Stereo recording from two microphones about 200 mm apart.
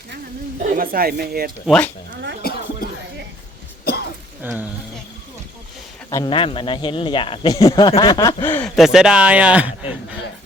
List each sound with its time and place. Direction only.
0.7 s speech: 45° right (ahead or behind)
1.6 s speech: 5° left (ahead or behind)
3.8 s throat clearing: 55° left (ahead or behind)
4.4 s speech: 10° right (ahead or behind)
6.1 s a man's voice: 15° left (ahead or behind)
6.3 s speech: 25° left (ahead or behind); by 8.7 s 10° left (ahead or behind)
8.7 s speech: centre (ahead or behind)